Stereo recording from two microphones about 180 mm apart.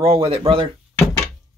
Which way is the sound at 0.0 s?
30° right (ahead or behind).